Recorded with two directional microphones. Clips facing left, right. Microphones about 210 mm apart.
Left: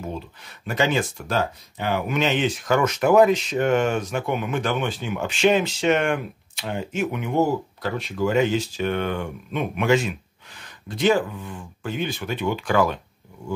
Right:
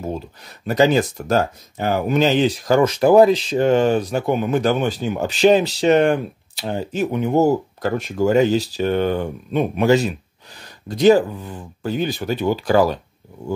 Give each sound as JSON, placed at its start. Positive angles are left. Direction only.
{"t": 0.7, "sound": "speech", "side_deg": -40}